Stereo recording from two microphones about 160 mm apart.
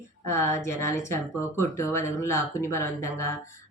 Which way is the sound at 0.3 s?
15° left (ahead or behind).